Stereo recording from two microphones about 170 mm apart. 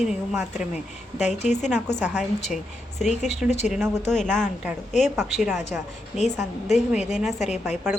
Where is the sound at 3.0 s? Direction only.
45° left (ahead or behind).